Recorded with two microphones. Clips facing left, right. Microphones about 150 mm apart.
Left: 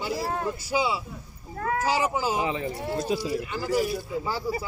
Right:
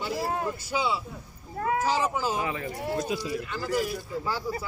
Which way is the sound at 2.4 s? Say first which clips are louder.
Left 3 dB; 25° left (ahead or behind).